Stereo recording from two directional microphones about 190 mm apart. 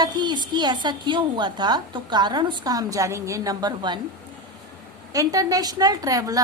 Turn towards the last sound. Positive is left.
turn(degrees=-20)  # may be behind; listen again after turning